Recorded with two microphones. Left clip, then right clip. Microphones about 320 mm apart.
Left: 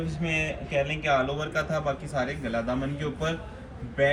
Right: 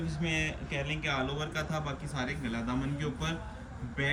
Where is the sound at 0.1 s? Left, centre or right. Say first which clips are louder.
Left 4 dB; centre.